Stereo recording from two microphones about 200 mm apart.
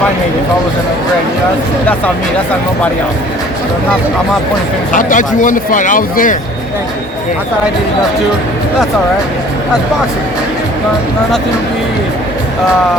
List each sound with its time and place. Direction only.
4.9 s speech: 40° left (ahead or behind)